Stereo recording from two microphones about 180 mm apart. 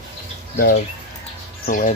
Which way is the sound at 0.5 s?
55° left (ahead or behind).